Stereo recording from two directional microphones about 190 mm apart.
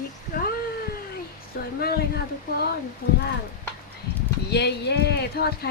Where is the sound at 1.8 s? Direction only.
55° left (ahead or behind).